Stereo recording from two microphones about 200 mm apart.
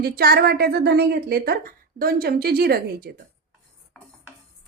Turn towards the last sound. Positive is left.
turn(degrees=-50)  # may be behind; listen again after turning